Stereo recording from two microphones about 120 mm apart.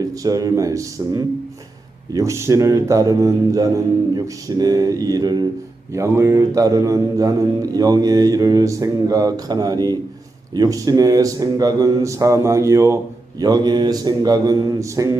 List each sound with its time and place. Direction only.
0.0 s a man's voice: 30° right (ahead or behind)
13.4 s speech: 35° right (ahead or behind)